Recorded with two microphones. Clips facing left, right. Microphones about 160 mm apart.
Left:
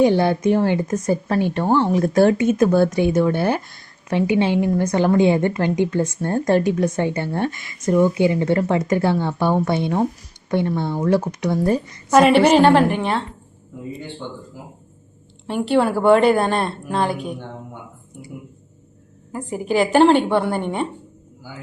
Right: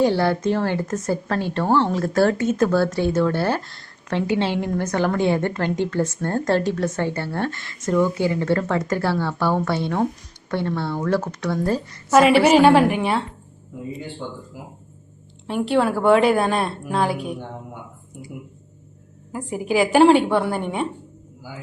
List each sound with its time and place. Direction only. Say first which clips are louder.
0.0 s a woman's voice: left 3 dB; 15° left (ahead or behind)
12.1 s a woman's voice: left 1 dB; 5° right (ahead or behind)
15.4 s a woman's voice: left 2 dB; centre (ahead or behind)
19.3 s a woman's voice: left 1 dB; 5° right (ahead or behind)